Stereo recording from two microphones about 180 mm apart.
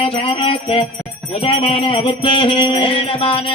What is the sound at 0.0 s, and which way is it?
Music, 30° left (ahead or behind).